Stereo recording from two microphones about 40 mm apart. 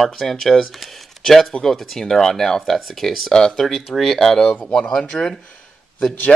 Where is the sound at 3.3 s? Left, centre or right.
Centre.